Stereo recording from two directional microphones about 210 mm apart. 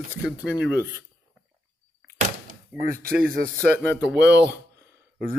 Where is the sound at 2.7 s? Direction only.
5° right (ahead or behind).